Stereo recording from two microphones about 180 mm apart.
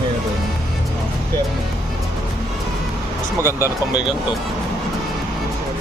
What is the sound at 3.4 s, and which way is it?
Speech, 15° left (ahead or behind).